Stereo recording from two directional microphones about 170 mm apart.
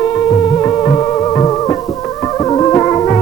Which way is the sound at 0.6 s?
20° left (ahead or behind).